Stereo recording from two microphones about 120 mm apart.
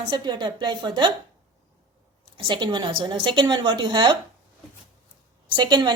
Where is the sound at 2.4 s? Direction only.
40° right (ahead or behind).